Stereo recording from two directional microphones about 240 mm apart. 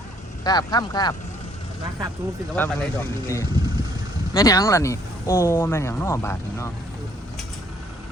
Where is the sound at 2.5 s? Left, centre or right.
Centre.